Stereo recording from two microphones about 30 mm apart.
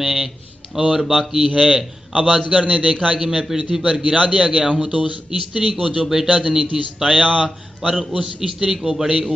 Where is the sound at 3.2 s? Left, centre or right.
Centre.